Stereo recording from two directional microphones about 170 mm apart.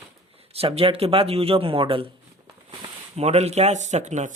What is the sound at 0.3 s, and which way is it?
Speech, 35° right (ahead or behind).